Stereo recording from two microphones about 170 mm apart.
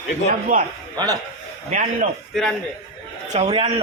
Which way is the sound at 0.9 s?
20° right (ahead or behind).